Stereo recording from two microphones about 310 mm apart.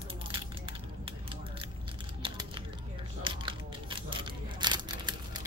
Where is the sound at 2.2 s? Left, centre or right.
Centre.